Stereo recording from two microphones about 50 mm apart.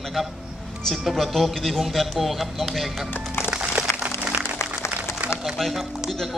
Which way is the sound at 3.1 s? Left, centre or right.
Left.